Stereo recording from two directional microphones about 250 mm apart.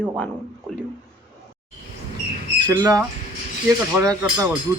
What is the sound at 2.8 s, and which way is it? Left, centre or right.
A man's voice, centre.